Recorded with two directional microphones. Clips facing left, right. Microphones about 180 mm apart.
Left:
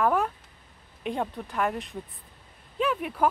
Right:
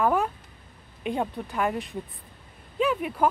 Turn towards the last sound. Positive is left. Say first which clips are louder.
# right 2 dB
turn(degrees=0)  # may be behind; listen again after turning